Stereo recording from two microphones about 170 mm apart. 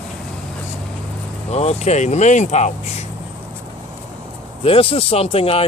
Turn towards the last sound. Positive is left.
turn(degrees=35)  # may be behind; listen again after turning